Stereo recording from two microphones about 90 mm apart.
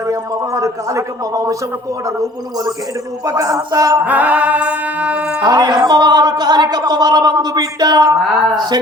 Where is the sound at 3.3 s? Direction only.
40° right (ahead or behind).